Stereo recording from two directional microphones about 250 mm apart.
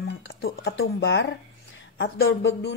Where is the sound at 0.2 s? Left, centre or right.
Left.